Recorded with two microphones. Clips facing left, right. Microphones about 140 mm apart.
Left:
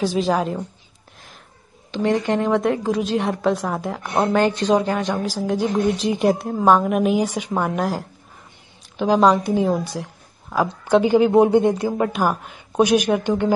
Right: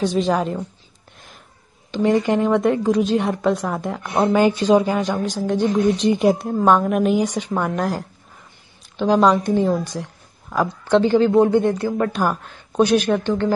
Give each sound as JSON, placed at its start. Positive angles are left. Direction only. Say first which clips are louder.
{"t": 0.0, "sound": "a woman's voice", "louder": "right 1 dB", "side_deg": 0}
{"t": 1.9, "sound": "a woman's voice", "louder": "right 2 dB", "side_deg": 0}
{"t": 9.8, "sound": "a sound", "louder": "even", "side_deg": 5}
{"t": 10.9, "sound": "speech", "louder": "even", "side_deg": 15}
{"t": 12.1, "sound": "speech", "louder": "even", "side_deg": 5}